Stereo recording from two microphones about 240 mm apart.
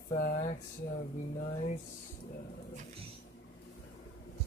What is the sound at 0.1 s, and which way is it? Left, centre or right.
Speech, left.